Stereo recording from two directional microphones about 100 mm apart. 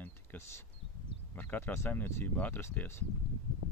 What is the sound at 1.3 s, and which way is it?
Speech, 20° left (ahead or behind).